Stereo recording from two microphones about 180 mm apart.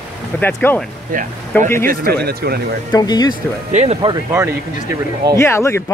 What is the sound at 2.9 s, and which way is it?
Speech, 20° left (ahead or behind).